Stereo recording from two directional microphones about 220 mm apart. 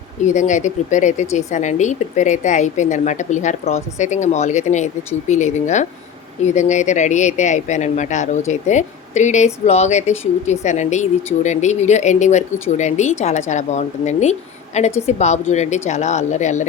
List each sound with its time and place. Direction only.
0.2 s speech: 35° left (ahead or behind)